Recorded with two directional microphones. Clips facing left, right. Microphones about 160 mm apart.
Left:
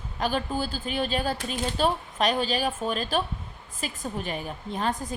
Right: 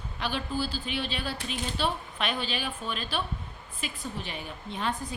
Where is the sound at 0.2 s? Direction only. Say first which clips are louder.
Left 4 dB; 45° left (ahead or behind).